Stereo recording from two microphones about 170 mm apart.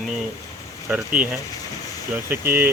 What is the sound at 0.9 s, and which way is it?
Speech, 5° right (ahead or behind).